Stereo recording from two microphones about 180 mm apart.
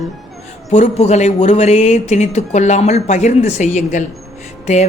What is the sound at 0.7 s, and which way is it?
Speech, 40° left (ahead or behind).